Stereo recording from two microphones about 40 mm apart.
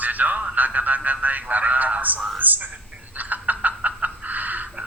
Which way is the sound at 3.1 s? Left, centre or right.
Right.